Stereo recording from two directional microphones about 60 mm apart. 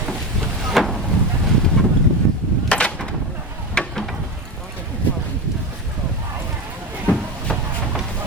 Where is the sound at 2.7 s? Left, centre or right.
Centre.